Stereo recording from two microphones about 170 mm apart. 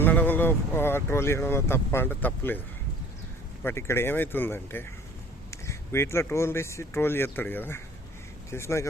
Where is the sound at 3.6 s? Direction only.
15° left (ahead or behind).